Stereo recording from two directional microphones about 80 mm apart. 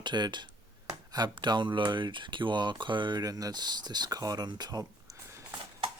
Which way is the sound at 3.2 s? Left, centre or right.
Right.